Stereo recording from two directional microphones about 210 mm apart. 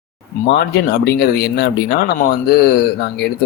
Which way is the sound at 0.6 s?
50° left (ahead or behind).